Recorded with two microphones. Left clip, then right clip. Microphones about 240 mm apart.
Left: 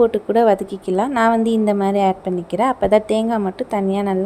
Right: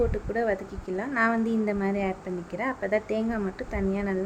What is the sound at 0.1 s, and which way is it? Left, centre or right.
A woman's voice, left.